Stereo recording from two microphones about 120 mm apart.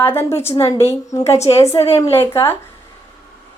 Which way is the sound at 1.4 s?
55° left (ahead or behind).